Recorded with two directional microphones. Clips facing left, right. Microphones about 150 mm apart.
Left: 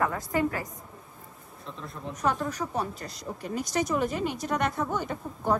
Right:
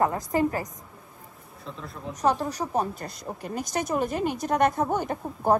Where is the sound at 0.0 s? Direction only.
35° right (ahead or behind).